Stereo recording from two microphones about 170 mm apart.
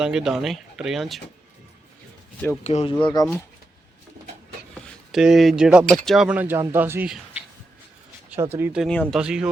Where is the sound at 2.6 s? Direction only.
40° left (ahead or behind).